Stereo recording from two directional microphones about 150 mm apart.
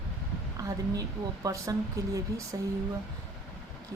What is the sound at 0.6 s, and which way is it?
Speech, 20° right (ahead or behind).